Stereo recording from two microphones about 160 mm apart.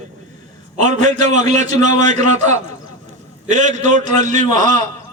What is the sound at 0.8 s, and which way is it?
A man's voice, 50° right (ahead or behind).